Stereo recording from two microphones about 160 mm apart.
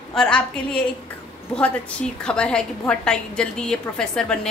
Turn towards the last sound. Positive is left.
turn(degrees=5)  # may be behind; listen again after turning